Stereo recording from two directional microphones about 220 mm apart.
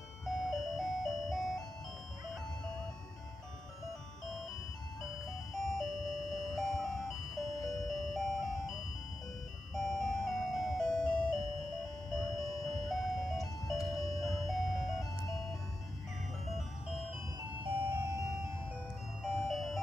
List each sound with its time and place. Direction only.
0.2 s music: centre (ahead or behind)
5.5 s music: centre (ahead or behind)
16.4 s music: centre (ahead or behind)
17.6 s music: 20° right (ahead or behind)
19.4 s music: centre (ahead or behind)